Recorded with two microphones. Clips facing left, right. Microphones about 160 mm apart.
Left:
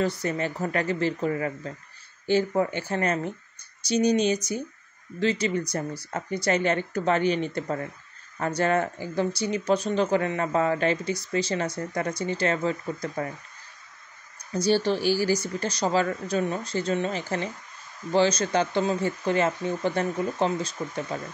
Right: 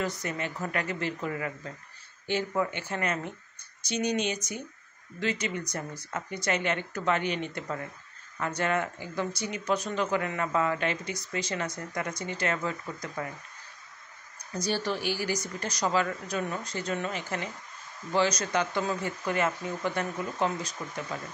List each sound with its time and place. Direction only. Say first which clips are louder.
0.0 s speech: left 6 dB; 30° left (ahead or behind)
14.5 s speech: left 7 dB; 30° left (ahead or behind)